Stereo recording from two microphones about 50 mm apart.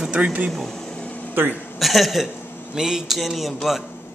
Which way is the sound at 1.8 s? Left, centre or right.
Centre.